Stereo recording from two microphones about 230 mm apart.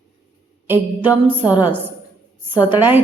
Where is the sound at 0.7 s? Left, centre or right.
Centre.